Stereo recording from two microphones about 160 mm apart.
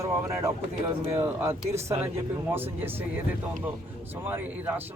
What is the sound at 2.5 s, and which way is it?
Speech, 15° right (ahead or behind).